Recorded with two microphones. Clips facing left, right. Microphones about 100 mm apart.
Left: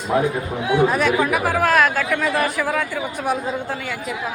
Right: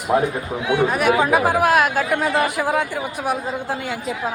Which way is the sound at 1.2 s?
25° right (ahead or behind).